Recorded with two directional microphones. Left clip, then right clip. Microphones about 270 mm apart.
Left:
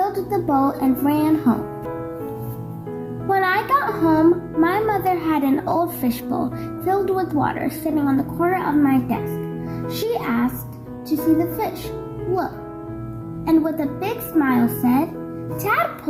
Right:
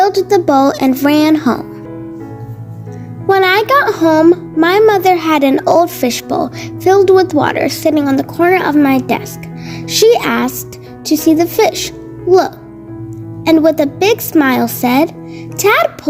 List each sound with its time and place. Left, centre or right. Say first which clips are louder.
0.0 s a child's voice: right 11 dB; right
3.2 s a child's voice: right 9 dB; right
13.4 s a child's voice: right 10 dB; right